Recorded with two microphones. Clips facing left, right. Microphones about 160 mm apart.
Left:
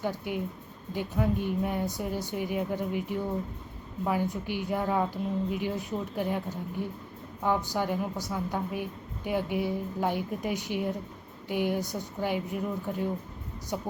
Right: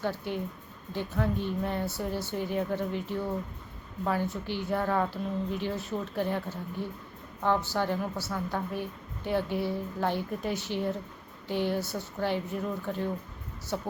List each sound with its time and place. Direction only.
0.0 s a woman's voice: 15° left (ahead or behind)